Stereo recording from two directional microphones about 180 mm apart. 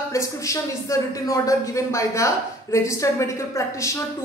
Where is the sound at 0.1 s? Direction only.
15° left (ahead or behind).